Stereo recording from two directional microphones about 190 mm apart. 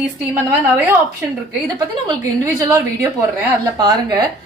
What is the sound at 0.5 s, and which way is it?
Speech, 10° right (ahead or behind).